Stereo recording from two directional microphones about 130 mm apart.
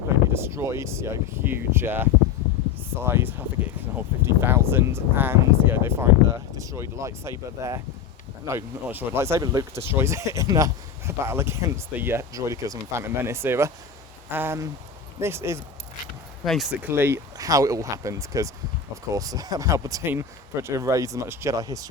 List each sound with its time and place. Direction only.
0.3 s speech: 20° right (ahead or behind)
16.5 s speech: centre (ahead or behind)
16.8 s speech: 15° right (ahead or behind)